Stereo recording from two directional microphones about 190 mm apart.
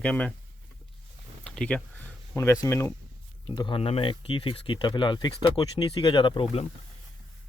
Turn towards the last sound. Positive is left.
turn(degrees=30)  # may be behind; listen again after turning